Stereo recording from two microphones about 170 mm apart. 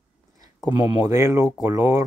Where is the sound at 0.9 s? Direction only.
20° right (ahead or behind).